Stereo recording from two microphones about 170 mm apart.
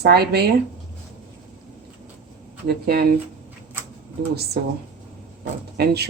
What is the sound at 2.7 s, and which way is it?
Speech, 65° right (ahead or behind).